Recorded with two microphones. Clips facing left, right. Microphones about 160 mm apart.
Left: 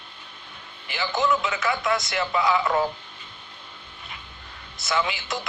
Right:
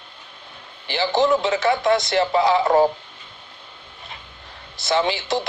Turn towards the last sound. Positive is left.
turn(degrees=-35)  # may be behind; listen again after turning